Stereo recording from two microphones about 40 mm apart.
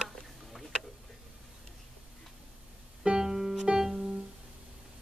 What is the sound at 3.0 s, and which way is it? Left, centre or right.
Music, centre.